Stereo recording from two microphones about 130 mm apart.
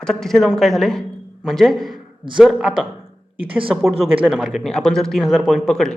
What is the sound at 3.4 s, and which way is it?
Speech, 45° right (ahead or behind).